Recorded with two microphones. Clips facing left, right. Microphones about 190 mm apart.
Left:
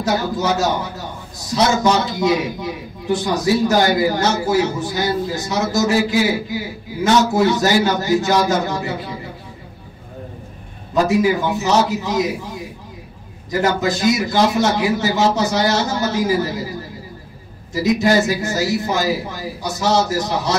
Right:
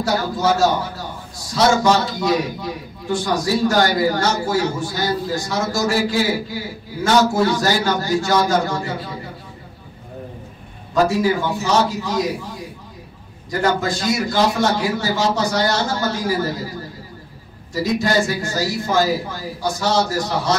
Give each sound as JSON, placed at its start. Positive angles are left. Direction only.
{"t": 0.0, "sound": "a man's voice", "side_deg": 20}
{"t": 11.1, "sound": "a man's voice", "side_deg": 20}
{"t": 13.5, "sound": "a man's voice", "side_deg": 20}
{"t": 17.7, "sound": "a man's voice", "side_deg": 20}